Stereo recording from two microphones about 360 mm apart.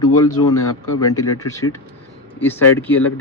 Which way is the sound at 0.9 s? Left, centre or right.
Centre.